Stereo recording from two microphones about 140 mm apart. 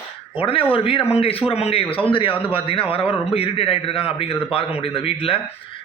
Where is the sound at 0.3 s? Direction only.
40° left (ahead or behind).